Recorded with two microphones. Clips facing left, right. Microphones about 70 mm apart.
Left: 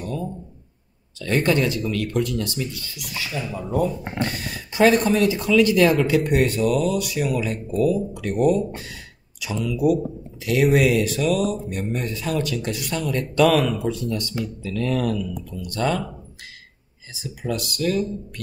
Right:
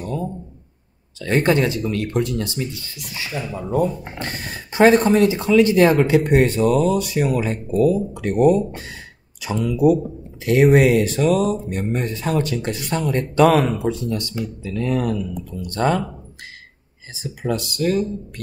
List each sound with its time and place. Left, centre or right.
0.0 s a sound: right
1.2 s speech: right
4.2 s speech: right
17.1 s speech: right